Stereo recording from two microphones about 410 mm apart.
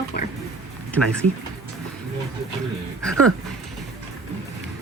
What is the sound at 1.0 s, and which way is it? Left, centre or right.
Speech, right.